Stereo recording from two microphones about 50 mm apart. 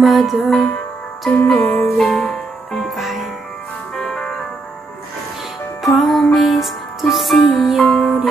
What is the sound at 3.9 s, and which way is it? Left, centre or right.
Music, centre.